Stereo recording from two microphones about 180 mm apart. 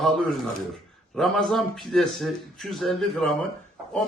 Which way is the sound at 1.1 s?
Centre (ahead or behind).